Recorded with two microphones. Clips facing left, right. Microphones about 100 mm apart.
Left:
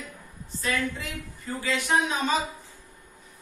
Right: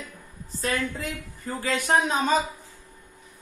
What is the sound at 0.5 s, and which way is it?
A man's voice, 40° right (ahead or behind).